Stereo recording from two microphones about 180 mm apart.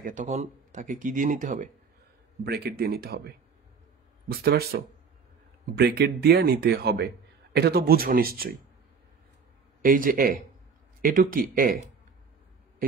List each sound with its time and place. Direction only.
0.0 s speech: 45° right (ahead or behind)
2.4 s speech: 60° right (ahead or behind)
5.8 s speech: 60° right (ahead or behind)
9.8 s speech: 50° right (ahead or behind)